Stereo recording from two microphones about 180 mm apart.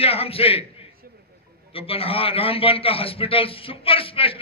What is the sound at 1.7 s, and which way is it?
A man's voice, 30° left (ahead or behind).